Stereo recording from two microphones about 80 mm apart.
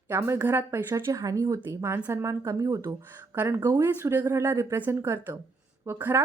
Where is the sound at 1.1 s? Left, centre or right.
Right.